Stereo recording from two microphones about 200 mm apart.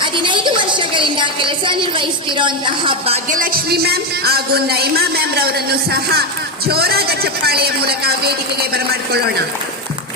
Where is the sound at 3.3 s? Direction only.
45° right (ahead or behind).